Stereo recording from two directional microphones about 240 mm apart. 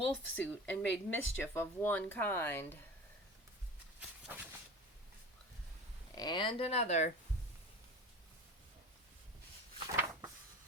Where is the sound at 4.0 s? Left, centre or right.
Centre.